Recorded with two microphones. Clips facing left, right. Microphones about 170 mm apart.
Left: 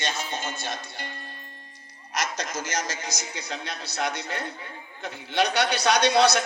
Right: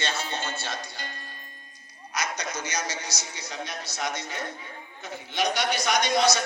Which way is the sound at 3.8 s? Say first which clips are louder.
Left 3 dB; 60° left (ahead or behind).